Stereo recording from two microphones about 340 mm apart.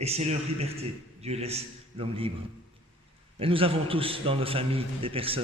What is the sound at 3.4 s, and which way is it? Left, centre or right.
A man's voice, centre.